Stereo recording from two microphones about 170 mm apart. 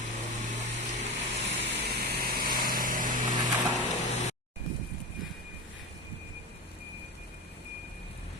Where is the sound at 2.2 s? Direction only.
60° right (ahead or behind).